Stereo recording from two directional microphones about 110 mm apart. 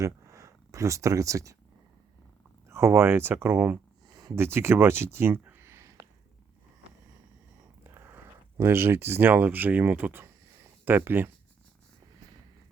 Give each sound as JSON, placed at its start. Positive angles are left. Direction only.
{"t": 0.0, "sound": "speech", "side_deg": -30}
{"t": 2.6, "sound": "speech", "side_deg": -25}
{"t": 4.1, "sound": "a sound", "side_deg": -35}
{"t": 4.4, "sound": "speech", "side_deg": -20}
{"t": 7.9, "sound": "speech", "side_deg": -20}